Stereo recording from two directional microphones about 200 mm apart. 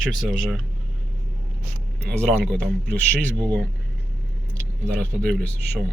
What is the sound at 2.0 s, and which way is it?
Speech, centre (ahead or behind).